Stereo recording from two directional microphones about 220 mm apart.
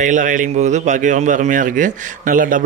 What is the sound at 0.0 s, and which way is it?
A man's voice, 35° right (ahead or behind).